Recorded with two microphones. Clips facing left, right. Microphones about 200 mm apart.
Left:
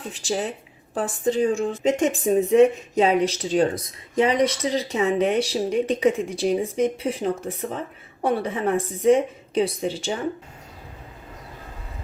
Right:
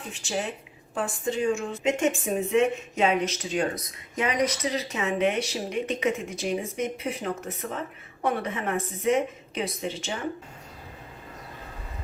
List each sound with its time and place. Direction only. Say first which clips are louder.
0.1 s speech: left 4 dB; 35° left (ahead or behind)